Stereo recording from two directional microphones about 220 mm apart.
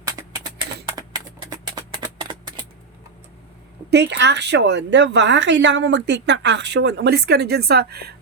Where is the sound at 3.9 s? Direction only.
55° right (ahead or behind).